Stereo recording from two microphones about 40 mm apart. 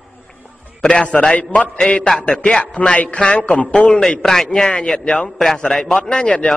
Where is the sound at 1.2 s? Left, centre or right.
Left.